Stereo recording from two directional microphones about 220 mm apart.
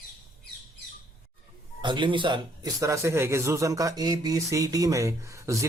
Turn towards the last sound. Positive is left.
turn(degrees=-15)  # may be behind; listen again after turning